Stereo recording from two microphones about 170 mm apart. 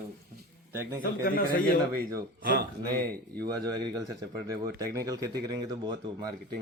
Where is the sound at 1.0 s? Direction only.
55° left (ahead or behind).